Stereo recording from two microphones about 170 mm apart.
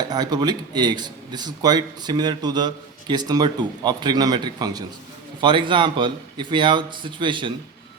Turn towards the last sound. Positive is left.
turn(degrees=-30)  # may be behind; listen again after turning